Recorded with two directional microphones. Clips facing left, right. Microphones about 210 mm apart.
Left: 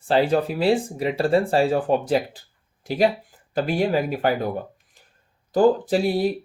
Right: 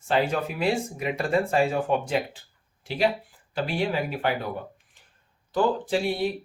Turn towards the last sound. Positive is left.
turn(degrees=40)  # may be behind; listen again after turning